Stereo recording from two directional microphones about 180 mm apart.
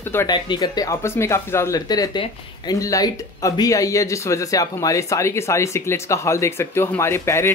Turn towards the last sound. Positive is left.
turn(degrees=15)  # may be behind; listen again after turning